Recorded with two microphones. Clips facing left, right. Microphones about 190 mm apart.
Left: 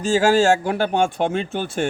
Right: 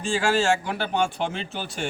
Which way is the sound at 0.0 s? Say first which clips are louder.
Left 7 dB; 40° left (ahead or behind).